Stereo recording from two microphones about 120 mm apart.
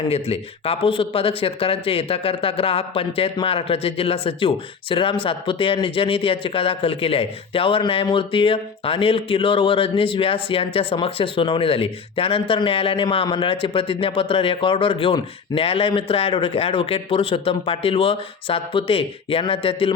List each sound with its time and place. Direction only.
0.1 s speech: 55° left (ahead or behind)